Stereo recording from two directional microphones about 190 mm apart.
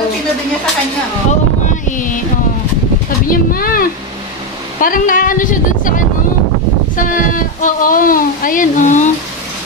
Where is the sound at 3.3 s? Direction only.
50° left (ahead or behind).